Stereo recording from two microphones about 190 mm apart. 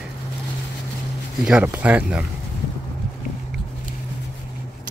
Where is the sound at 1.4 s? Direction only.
5° right (ahead or behind).